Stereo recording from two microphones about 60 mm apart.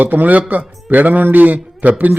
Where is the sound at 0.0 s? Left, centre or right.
Right.